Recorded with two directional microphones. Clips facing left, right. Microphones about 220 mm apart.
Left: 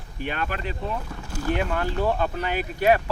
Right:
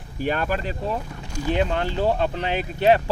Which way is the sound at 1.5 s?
25° right (ahead or behind).